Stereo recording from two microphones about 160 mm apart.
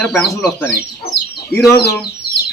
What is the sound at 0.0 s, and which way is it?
Speech, 5° left (ahead or behind).